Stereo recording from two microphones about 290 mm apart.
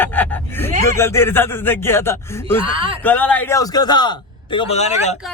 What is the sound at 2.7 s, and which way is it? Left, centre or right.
Speech, centre.